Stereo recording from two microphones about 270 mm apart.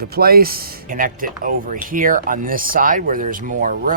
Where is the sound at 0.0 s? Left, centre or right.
Right.